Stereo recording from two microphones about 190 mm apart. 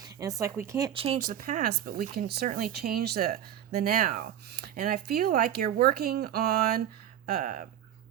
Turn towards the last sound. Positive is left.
turn(degrees=-50)  # may be behind; listen again after turning